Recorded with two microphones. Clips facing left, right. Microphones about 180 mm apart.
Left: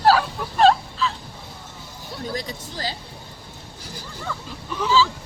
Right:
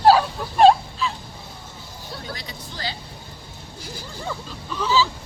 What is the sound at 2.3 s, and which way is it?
Speech, 45° left (ahead or behind).